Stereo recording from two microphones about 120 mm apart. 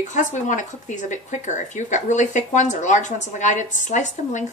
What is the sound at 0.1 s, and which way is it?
Speech, 90° left.